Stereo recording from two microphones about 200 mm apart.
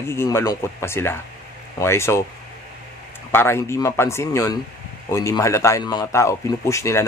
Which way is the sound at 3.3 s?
10° left (ahead or behind).